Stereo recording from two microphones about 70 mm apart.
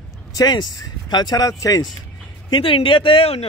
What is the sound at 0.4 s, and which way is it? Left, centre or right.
Speech, left.